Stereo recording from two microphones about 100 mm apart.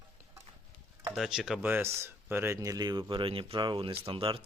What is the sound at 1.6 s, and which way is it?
Speech, 20° right (ahead or behind).